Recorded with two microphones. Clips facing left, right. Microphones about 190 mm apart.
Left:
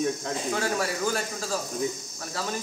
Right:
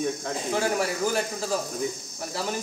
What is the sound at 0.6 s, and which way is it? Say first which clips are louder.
Speech: right 5 dB; 20° right (ahead or behind).